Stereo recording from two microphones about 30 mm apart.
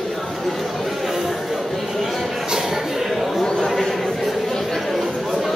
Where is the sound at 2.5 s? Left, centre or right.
Centre.